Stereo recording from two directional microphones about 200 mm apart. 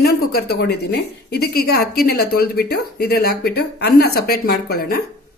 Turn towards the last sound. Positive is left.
turn(degrees=50)  # may be behind; listen again after turning